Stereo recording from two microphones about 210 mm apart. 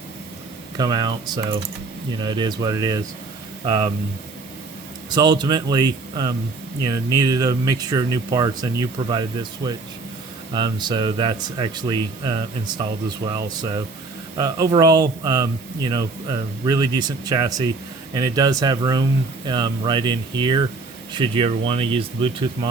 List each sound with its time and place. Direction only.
0.8 s speech: 20° right (ahead or behind)
5.1 s speech: 20° right (ahead or behind)